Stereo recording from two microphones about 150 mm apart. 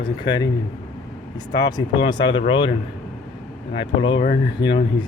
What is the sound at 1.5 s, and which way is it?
Speech, 30° left (ahead or behind).